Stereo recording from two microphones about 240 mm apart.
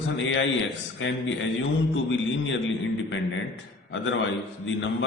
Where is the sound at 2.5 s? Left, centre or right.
Left.